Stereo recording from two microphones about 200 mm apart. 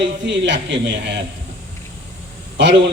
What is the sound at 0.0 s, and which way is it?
A man's voice, 65° right (ahead or behind).